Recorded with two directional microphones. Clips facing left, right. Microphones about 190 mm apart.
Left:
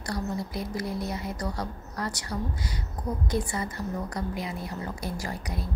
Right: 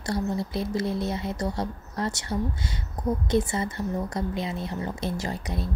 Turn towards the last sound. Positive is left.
turn(degrees=-25)  # may be behind; listen again after turning